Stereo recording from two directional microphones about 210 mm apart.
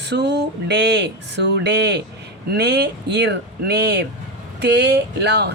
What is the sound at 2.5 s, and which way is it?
Speech, 50° right (ahead or behind).